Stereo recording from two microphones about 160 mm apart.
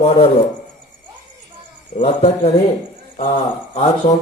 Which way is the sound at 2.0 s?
35° left (ahead or behind).